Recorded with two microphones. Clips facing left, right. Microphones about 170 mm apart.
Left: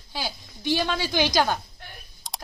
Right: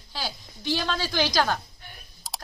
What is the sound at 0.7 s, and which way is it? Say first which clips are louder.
Speech: left 3 dB; 15° left (ahead or behind).